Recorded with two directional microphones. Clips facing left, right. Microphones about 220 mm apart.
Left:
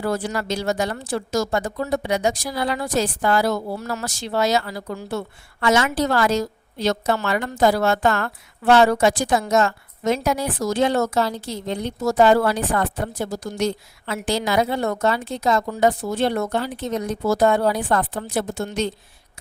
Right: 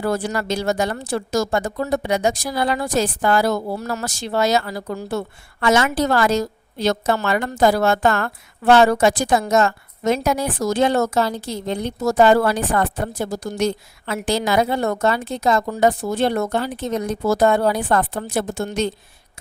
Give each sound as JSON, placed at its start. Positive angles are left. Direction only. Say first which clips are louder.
{"t": 0.0, "sound": "speech", "louder": "right 2 dB", "side_deg": -45}